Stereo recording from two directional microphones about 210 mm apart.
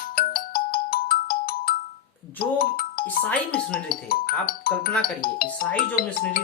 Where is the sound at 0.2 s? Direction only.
45° left (ahead or behind).